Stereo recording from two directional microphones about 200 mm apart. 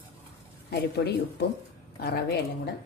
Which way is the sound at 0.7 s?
55° left (ahead or behind).